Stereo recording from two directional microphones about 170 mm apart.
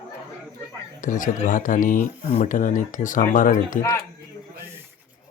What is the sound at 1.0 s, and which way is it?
Speech, 50° left (ahead or behind).